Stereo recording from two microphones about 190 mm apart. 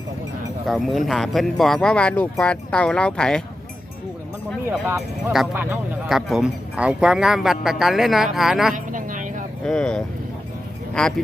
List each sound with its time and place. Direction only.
0.7 s speech: centre (ahead or behind)
4.7 s speech: centre (ahead or behind)
8.7 s a sound: 45° right (ahead or behind)
9.6 s speech: 5° left (ahead or behind)